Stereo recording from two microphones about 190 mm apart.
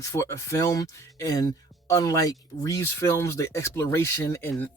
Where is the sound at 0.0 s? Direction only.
15° left (ahead or behind).